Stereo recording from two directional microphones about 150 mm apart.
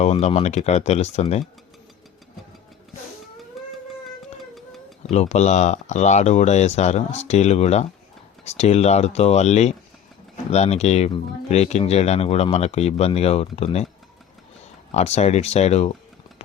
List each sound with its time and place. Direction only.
0.0 s speech: 45° left (ahead or behind)
5.1 s speech: 45° left (ahead or behind)
14.9 s speech: 45° left (ahead or behind)